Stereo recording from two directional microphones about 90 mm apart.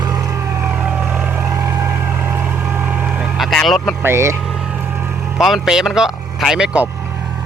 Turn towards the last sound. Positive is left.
turn(degrees=-5)  # may be behind; listen again after turning